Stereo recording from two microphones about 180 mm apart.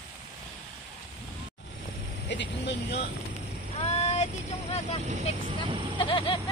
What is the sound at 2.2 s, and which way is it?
Speech, 75° left (ahead or behind).